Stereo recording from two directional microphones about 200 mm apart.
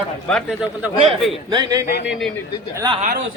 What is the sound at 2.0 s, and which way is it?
Speech, centre (ahead or behind).